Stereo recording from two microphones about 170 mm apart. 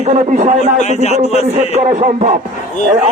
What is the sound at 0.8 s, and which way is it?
Speech, 40° left (ahead or behind).